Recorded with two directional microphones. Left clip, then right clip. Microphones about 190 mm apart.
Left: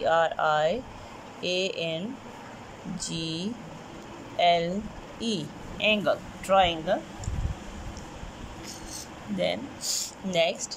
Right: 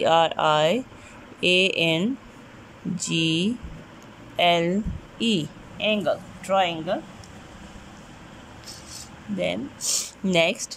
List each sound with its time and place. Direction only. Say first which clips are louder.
0.0 s speech: right 4 dB; 15° right (ahead or behind)
9.4 s speech: right 2 dB; 10° right (ahead or behind)